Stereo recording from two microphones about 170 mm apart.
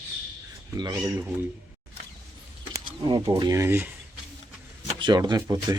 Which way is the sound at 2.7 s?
25° right (ahead or behind).